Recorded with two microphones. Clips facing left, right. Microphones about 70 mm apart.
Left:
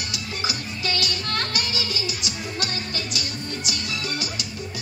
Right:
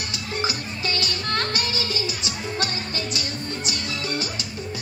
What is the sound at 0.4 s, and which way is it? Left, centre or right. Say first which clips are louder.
Music: right 3 dB; right.